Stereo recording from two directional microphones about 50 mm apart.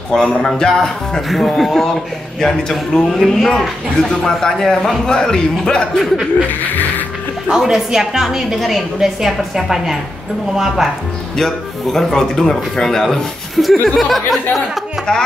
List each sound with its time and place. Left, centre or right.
0.1 s a man's voice: centre
6.6 s music: left
7.4 s a woman's voice: centre
11.3 s speech: centre